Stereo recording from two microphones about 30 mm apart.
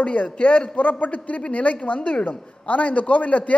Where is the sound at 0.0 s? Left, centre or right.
Left.